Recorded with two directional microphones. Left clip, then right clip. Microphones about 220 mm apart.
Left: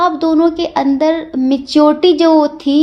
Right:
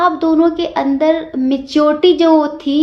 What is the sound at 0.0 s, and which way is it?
A woman's voice, 40° left (ahead or behind).